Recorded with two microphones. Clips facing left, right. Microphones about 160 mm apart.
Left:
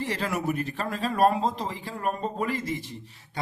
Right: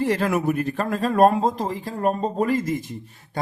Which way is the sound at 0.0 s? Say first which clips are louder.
Right 7 dB; 55° right (ahead or behind).